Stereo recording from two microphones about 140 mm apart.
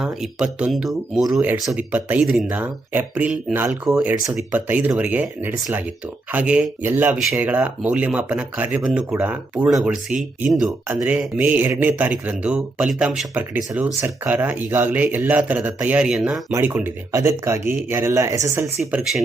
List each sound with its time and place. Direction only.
0.0 s speech: 5° right (ahead or behind)
16.5 s speech: 15° right (ahead or behind)
18.8 s speech: 5° right (ahead or behind)